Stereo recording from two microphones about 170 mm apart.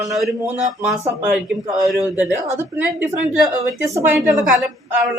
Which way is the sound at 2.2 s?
10° right (ahead or behind).